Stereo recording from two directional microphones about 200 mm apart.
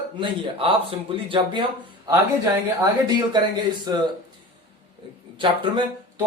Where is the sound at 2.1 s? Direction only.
15° right (ahead or behind).